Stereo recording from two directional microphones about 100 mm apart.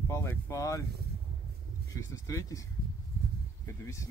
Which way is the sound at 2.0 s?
35° left (ahead or behind).